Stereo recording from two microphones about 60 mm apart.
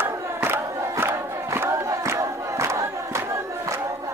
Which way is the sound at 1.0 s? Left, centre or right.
Right.